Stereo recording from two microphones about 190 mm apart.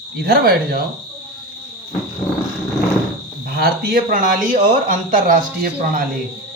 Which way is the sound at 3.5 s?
55° right (ahead or behind).